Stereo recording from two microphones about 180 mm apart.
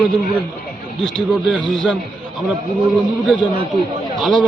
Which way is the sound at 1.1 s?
Centre (ahead or behind).